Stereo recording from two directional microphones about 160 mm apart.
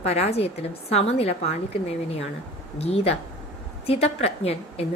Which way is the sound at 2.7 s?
40° left (ahead or behind).